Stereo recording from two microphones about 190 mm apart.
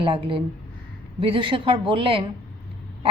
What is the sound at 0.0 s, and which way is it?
A woman's voice, 25° right (ahead or behind).